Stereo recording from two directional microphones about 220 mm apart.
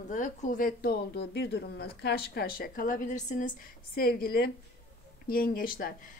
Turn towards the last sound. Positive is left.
turn(degrees=40)  # may be behind; listen again after turning